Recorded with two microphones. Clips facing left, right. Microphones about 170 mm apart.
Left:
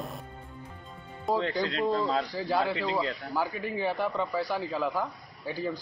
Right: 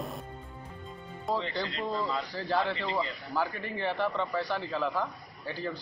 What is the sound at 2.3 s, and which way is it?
Speech, 10° left (ahead or behind).